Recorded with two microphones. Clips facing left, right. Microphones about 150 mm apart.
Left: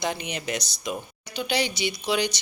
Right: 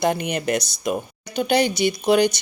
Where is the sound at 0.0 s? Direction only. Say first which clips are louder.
Right 8 dB; 55° right (ahead or behind).